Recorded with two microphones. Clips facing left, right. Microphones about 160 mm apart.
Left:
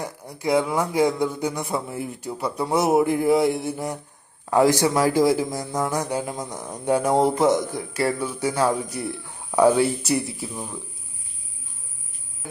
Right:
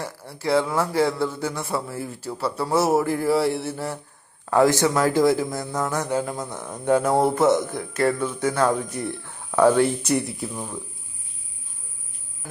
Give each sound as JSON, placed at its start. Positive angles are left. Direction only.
{"t": 0.0, "sound": "a man's voice", "side_deg": 15}